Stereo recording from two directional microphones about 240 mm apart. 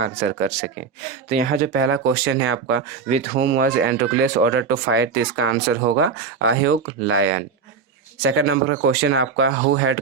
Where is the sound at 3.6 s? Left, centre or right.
Right.